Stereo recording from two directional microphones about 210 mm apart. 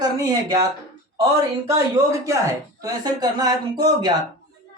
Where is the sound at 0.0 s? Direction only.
20° right (ahead or behind).